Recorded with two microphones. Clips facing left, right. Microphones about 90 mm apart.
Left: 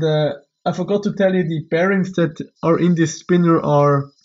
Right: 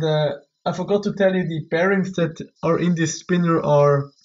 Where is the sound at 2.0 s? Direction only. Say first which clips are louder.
Left 4 dB; 60° left (ahead or behind).